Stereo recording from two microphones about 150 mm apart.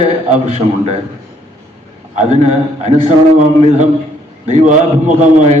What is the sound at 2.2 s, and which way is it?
Speech, 50° right (ahead or behind).